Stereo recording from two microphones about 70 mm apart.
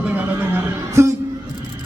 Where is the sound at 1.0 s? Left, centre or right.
Right.